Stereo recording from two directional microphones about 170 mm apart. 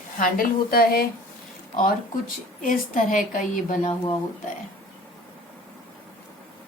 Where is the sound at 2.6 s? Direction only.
50° left (ahead or behind).